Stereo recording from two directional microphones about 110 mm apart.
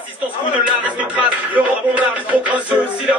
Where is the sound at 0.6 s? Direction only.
10° right (ahead or behind).